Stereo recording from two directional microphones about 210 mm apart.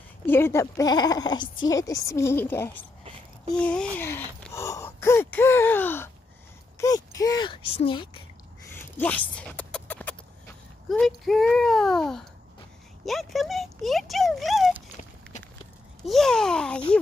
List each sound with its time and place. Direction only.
0.3 s a woman's voice: 10° left (ahead or behind)
8.7 s a sound: 10° left (ahead or behind)
10.9 s speech: centre (ahead or behind)
16.1 s speech: centre (ahead or behind)